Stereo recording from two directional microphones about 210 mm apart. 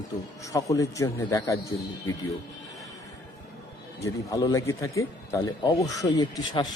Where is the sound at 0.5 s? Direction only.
15° left (ahead or behind).